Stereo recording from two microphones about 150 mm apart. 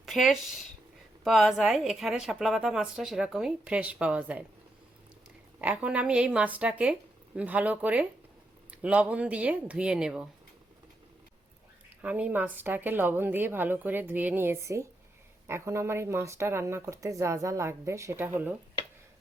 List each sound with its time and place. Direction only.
0.0 s speech: centre (ahead or behind)
5.5 s a woman's voice: 10° right (ahead or behind)
12.0 s a woman's voice: 10° right (ahead or behind)